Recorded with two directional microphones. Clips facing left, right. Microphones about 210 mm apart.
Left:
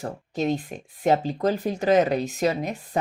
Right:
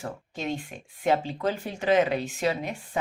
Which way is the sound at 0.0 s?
40° left (ahead or behind).